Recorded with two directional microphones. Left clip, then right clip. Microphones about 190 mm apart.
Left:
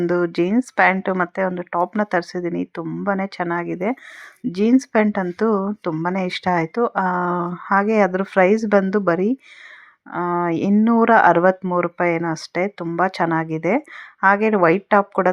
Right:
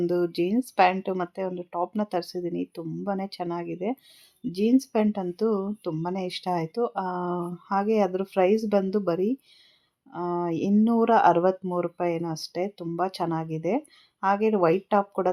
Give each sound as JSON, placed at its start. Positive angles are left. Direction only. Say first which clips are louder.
{"t": 0.0, "sound": "speech", "louder": "left 6 dB", "side_deg": 15}